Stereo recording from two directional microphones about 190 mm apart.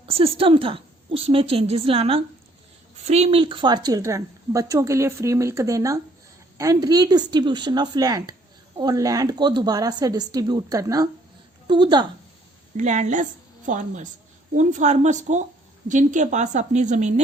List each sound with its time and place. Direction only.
0.0 s a woman's voice: 30° right (ahead or behind)
12.7 s a woman's voice: 40° right (ahead or behind)